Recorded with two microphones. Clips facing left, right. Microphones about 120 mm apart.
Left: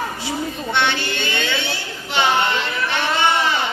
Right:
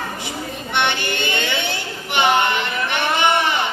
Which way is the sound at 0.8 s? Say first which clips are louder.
Right 1 dB; 20° right (ahead or behind).